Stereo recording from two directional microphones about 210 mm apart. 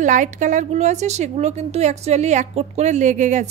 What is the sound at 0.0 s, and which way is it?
A woman's voice, 35° right (ahead or behind).